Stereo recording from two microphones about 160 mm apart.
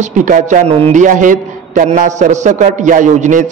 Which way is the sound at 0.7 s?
40° right (ahead or behind).